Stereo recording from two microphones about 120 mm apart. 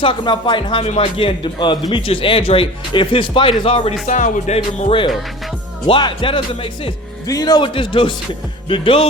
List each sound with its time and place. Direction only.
0.0 s speech: 45° left (ahead or behind)
4.0 s music: 85° left; by 5.1 s 50° left (ahead or behind)
5.9 s speech: 45° left (ahead or behind)
7.3 s a man's voice: 30° left (ahead or behind)
7.6 s speech: 45° left (ahead or behind)